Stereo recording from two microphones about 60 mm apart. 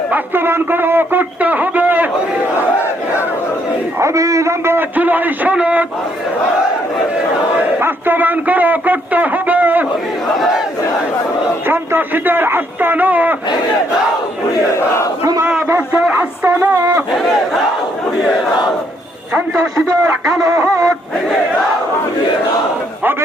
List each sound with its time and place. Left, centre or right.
0.1 s a man's voice: right
4.0 s a man's voice: right
4.6 s a man's voice: right
7.8 s a man's voice: right
11.7 s a man's voice: right
15.9 s speech: centre
16.5 s a man's voice: right
20.5 s music: right